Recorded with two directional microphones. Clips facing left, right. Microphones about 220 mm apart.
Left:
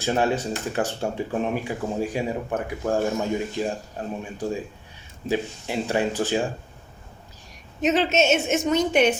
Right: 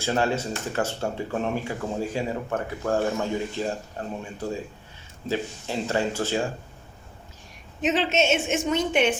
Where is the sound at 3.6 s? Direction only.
15° left (ahead or behind).